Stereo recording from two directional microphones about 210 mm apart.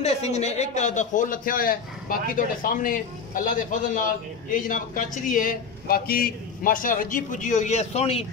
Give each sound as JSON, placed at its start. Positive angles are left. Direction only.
{"t": 0.0, "sound": "a man's voice", "side_deg": 30}